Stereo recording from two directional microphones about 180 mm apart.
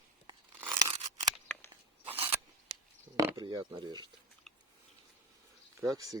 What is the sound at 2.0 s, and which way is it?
Crunch, 35° right (ahead or behind).